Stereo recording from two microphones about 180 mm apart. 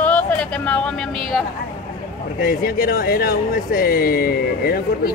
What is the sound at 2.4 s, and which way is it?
Speech, 55° left (ahead or behind).